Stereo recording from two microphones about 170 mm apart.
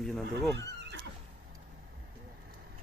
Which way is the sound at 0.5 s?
90° right.